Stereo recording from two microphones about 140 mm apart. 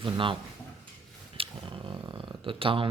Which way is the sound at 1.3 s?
40° right (ahead or behind).